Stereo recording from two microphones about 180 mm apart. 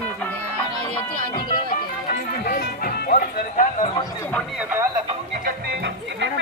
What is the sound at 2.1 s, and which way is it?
Speech, 55° left (ahead or behind).